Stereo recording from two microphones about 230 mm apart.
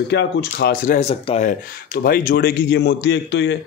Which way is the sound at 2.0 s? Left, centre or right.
Left.